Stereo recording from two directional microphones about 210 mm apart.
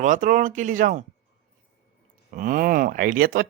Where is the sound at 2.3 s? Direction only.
40° right (ahead or behind).